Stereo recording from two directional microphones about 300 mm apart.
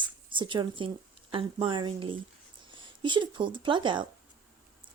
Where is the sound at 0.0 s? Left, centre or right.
Centre.